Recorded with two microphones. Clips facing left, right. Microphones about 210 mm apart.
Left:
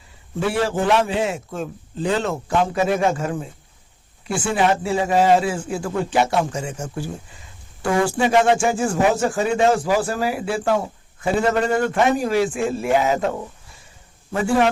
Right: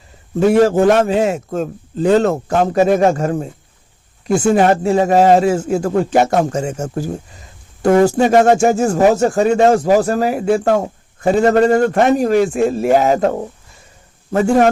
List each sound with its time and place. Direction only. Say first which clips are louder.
0.3 s speech: right 10 dB; 40° right (ahead or behind)